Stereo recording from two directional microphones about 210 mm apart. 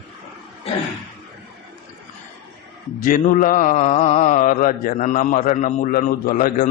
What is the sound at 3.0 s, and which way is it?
Mantra, 40° left (ahead or behind).